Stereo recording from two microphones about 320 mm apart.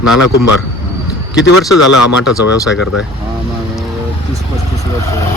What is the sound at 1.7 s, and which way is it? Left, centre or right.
Speech, left.